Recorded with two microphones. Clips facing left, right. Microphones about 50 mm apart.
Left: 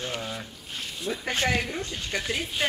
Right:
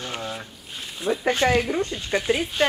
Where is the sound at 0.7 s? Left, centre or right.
Right.